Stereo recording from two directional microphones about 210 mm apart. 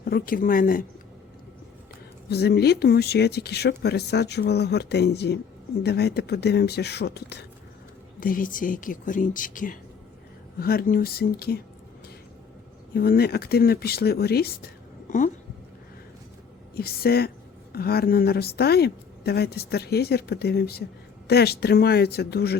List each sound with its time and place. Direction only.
0.0 s a woman's voice: 45° left (ahead or behind)
2.3 s a woman's voice: 50° left (ahead or behind)
8.2 s a woman's voice: 40° left (ahead or behind)
12.9 s a woman's voice: 45° left (ahead or behind)
16.7 s a woman's voice: 45° left (ahead or behind)